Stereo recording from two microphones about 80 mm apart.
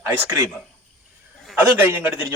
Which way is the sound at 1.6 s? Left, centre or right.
Right.